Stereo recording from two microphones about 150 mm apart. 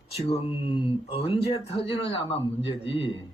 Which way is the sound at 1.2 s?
40° left (ahead or behind).